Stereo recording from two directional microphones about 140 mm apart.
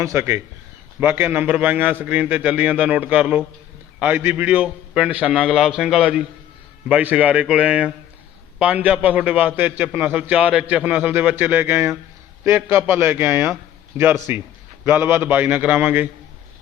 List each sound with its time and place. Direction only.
0.0 s a man's voice: 20° right (ahead or behind)